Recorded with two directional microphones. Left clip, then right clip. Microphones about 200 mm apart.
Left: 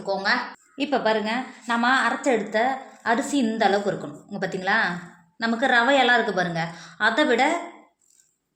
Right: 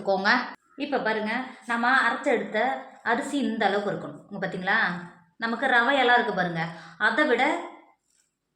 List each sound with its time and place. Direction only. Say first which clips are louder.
0.0 s a woman's voice: right 1 dB; 40° right (ahead or behind)
0.8 s a woman's voice: left 4 dB; 45° left (ahead or behind)